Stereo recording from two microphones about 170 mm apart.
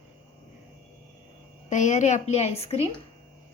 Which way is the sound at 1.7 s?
45° left (ahead or behind).